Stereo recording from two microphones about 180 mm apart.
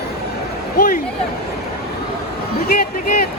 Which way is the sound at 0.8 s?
50° left (ahead or behind).